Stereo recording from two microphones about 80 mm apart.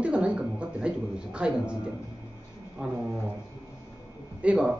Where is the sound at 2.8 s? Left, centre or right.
Centre.